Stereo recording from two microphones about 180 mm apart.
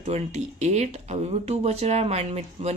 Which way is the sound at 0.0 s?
40° right (ahead or behind).